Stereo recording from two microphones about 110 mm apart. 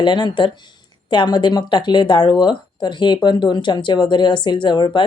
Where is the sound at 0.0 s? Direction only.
45° left (ahead or behind).